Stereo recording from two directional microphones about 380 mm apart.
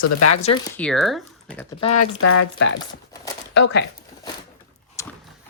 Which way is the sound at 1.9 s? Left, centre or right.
Left.